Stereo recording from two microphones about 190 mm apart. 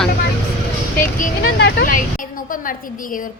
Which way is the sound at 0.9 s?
50° left (ahead or behind).